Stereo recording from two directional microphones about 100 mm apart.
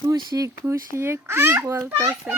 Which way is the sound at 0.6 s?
25° right (ahead or behind).